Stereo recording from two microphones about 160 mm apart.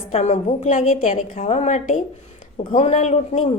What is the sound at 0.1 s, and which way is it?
A woman's voice, 45° left (ahead or behind).